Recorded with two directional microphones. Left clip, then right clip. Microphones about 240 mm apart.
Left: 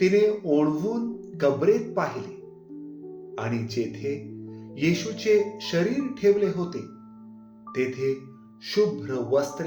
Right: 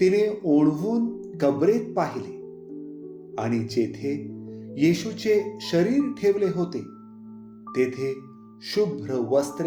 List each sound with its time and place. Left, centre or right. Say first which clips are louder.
0.0 s speech: even; right
3.3 s speech: right 4 dB; right